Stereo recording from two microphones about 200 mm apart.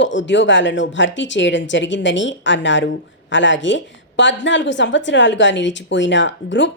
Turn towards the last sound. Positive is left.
turn(degrees=65)  # may be behind; listen again after turning